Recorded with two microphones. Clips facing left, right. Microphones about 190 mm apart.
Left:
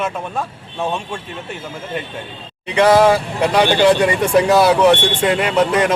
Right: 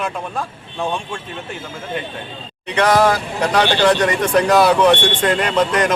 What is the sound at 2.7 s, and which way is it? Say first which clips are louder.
Speech: left 3 dB; 10° left (ahead or behind).